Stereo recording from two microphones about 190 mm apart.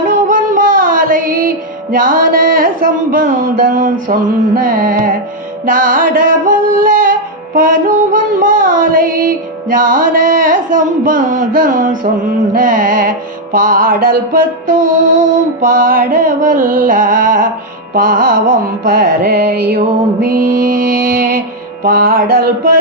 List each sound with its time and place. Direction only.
0.1 s music: 45° right (ahead or behind)
20.2 s music: 45° right (ahead or behind)